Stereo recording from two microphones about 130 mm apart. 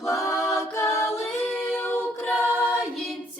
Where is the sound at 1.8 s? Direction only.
15° left (ahead or behind).